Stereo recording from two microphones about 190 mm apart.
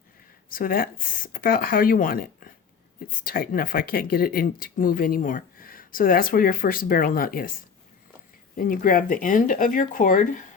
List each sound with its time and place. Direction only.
0.5 s speech: 50° left (ahead or behind)
8.5 s speech: 45° left (ahead or behind)